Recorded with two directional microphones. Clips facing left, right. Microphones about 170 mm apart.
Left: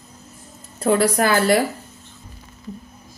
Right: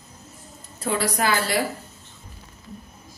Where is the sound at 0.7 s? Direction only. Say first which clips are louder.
Left 8 dB; 55° left (ahead or behind).